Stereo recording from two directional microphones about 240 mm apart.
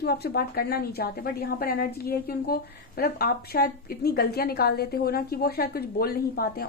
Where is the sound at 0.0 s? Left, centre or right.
Left.